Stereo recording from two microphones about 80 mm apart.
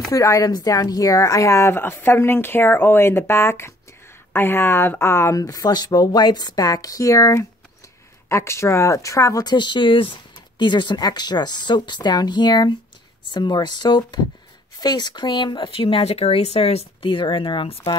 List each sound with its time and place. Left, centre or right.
0.1 s speech: left
5.4 s speech: left
17.0 s speech: left